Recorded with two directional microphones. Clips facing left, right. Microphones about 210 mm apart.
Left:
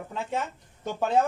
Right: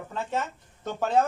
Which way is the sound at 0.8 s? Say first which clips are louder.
Even; 10° left (ahead or behind).